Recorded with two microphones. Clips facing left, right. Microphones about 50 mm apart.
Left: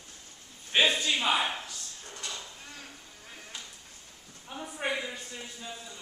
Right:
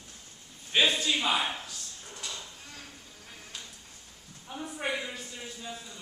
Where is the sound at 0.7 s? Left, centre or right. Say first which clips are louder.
Even; centre.